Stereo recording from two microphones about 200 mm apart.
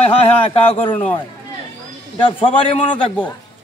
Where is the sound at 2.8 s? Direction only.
5° left (ahead or behind).